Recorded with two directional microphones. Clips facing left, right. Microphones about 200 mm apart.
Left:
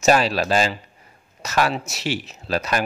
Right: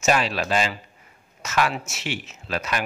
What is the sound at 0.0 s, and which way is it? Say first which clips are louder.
Speech: left 4 dB; 35° left (ahead or behind).